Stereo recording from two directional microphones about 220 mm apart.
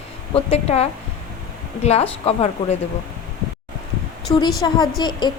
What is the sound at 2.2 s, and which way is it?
Speech, 25° left (ahead or behind).